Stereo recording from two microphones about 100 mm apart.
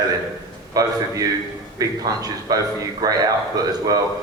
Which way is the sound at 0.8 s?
35° right (ahead or behind).